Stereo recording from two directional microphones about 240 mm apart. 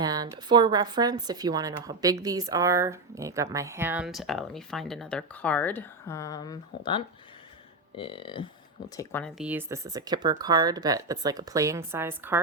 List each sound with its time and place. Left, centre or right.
0.0 s a woman's voice: centre; by 8.4 s left
9.0 s speech: centre
9.4 s a woman's voice: centre